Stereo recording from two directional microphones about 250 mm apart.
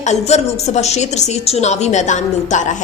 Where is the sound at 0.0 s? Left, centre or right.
Left.